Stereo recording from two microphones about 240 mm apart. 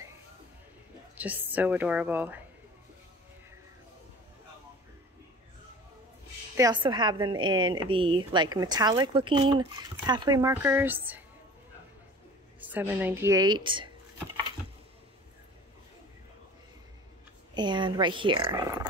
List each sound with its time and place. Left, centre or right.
1.1 s speech: centre
6.5 s a woman's voice: centre
12.5 s speech: centre
17.6 s a woman's voice: centre